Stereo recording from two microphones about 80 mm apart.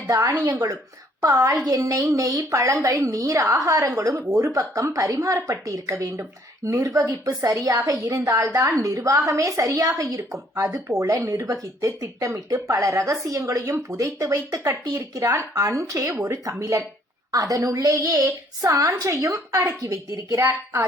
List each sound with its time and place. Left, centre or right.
0.1 s a woman's voice: right